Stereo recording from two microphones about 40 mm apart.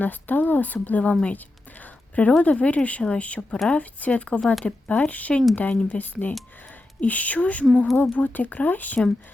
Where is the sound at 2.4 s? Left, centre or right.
Left.